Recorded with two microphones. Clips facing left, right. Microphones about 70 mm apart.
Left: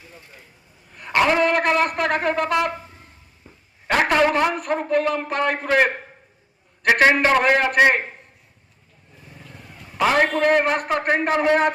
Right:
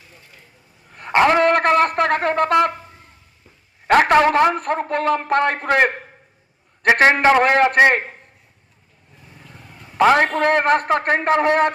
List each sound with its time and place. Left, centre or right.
0.9 s a man's voice: right
3.8 s a man's voice: right
6.9 s a man's voice: right
10.0 s a man's voice: right